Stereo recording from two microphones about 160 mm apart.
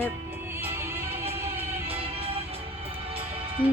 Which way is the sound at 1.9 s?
35° right (ahead or behind).